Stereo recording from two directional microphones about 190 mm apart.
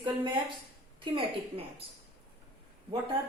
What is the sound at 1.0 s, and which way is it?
Speech, 25° right (ahead or behind).